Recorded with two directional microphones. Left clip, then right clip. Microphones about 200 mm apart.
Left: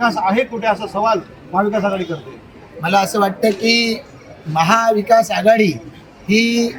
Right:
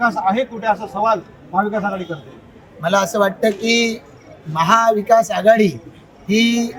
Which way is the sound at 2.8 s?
15° right (ahead or behind).